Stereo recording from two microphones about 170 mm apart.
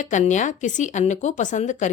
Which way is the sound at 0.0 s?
45° left (ahead or behind).